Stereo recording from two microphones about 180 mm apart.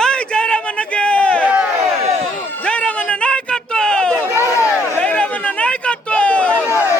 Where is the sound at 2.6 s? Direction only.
5° left (ahead or behind).